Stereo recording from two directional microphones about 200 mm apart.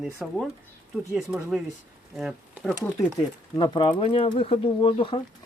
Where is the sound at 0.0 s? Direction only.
Centre (ahead or behind).